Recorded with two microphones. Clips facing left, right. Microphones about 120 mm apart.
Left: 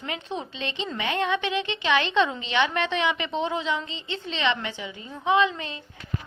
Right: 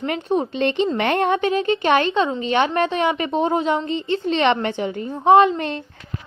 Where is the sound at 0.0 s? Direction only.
50° right (ahead or behind).